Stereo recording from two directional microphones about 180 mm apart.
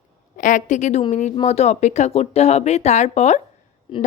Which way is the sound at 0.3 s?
45° left (ahead or behind).